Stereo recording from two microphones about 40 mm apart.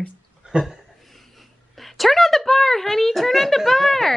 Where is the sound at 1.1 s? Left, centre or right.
Centre.